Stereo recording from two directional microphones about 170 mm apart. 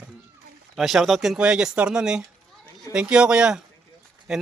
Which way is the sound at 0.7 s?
Centre (ahead or behind).